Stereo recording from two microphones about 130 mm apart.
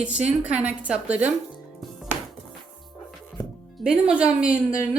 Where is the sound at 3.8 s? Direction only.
5° right (ahead or behind).